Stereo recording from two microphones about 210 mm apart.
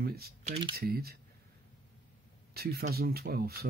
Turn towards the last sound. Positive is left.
turn(degrees=-45)  # may be behind; listen again after turning